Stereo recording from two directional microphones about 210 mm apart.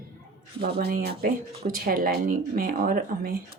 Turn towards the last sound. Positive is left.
turn(degrees=-45)  # may be behind; listen again after turning